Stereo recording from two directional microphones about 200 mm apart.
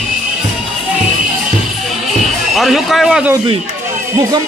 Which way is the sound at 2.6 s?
Centre (ahead or behind).